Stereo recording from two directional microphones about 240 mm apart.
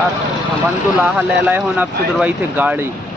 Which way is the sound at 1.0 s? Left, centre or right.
Centre.